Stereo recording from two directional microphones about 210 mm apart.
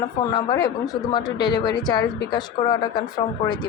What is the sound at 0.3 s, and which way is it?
A woman's voice, 20° left (ahead or behind).